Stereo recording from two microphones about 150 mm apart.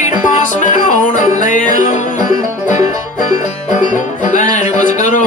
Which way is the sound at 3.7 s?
60° left (ahead or behind).